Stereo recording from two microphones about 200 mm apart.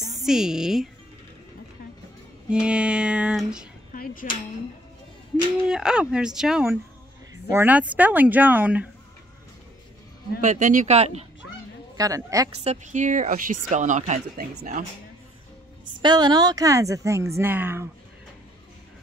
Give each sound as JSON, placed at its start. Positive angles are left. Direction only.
{"t": 0.2, "sound": "speech", "side_deg": 0}
{"t": 2.6, "sound": "speech", "side_deg": -5}
{"t": 3.9, "sound": "speech", "side_deg": 45}
{"t": 5.7, "sound": "a woman's voice", "side_deg": -5}
{"t": 10.4, "sound": "speech", "side_deg": -35}
{"t": 12.0, "sound": "a woman's voice", "side_deg": -15}
{"t": 12.6, "sound": "speech", "side_deg": -35}
{"t": 16.0, "sound": "a woman's voice", "side_deg": -20}